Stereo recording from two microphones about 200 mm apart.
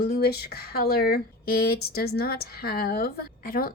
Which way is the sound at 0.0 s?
50° left (ahead or behind).